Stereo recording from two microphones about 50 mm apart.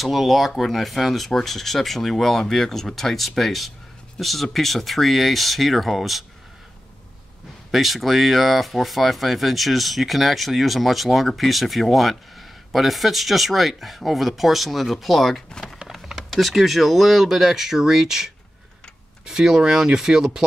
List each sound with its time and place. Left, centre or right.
0.0 s speech: centre
7.7 s speech: centre
15.9 s a sound: centre
16.3 s speech: centre